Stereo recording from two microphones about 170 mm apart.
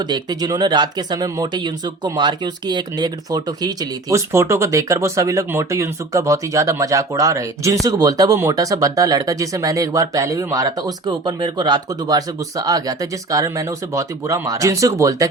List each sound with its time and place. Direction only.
0.1 s speech: 25° right (ahead or behind)